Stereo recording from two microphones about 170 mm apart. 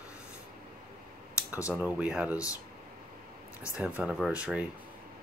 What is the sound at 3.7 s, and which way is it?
Speech, 5° right (ahead or behind).